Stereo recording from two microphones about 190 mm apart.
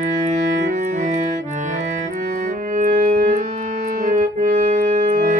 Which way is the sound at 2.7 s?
45° right (ahead or behind).